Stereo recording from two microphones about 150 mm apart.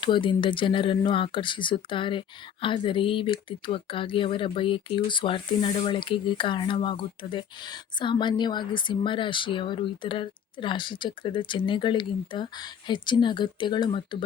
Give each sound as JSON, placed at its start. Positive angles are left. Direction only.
{"t": 0.0, "sound": "speech", "side_deg": 30}